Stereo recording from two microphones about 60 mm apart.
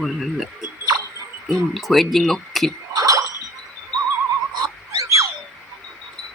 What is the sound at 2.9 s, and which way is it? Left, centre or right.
Gargling, right.